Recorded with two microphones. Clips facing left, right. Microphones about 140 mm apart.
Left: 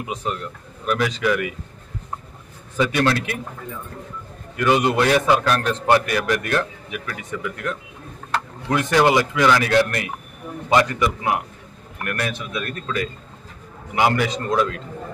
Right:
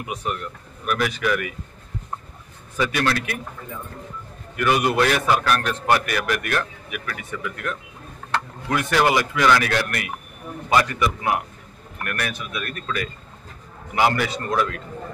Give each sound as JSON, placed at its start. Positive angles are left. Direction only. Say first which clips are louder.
{"t": 0.0, "sound": "a man's voice", "louder": "left 1 dB", "side_deg": 25}
{"t": 2.8, "sound": "a man's voice", "louder": "left 3 dB", "side_deg": 20}
{"t": 4.6, "sound": "a man's voice", "louder": "left 2 dB", "side_deg": 20}
{"t": 13.9, "sound": "a man's voice", "louder": "left 1 dB", "side_deg": 15}